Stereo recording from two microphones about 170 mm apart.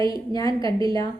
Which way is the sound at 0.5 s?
30° right (ahead or behind).